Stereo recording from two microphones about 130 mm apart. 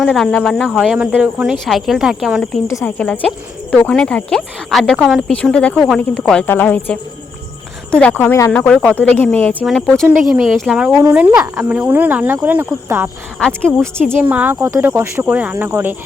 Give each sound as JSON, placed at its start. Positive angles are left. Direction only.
{"t": 0.0, "sound": "speech", "side_deg": 5}
{"t": 2.6, "sound": "speech", "side_deg": 20}
{"t": 3.0, "sound": "a woman's voice", "side_deg": 10}
{"t": 10.1, "sound": "speech", "side_deg": -5}
{"t": 13.4, "sound": "a woman's voice", "side_deg": 5}
{"t": 14.1, "sound": "speech", "side_deg": -15}